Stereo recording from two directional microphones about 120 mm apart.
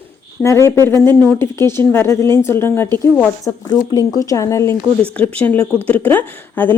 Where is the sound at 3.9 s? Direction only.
30° left (ahead or behind).